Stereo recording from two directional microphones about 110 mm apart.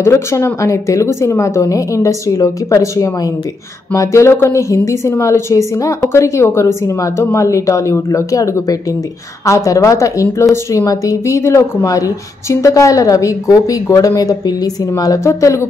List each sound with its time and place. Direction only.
0.0 s speech: 25° left (ahead or behind)